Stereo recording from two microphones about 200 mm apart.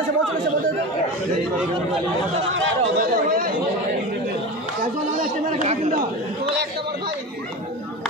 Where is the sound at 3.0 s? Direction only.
45° right (ahead or behind).